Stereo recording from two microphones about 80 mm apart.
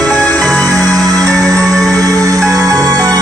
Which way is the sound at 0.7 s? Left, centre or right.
Right.